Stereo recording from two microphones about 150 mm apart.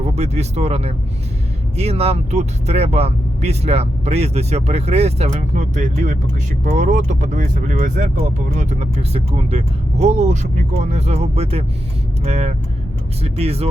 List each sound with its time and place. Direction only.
0.0 s speech: 45° right (ahead or behind)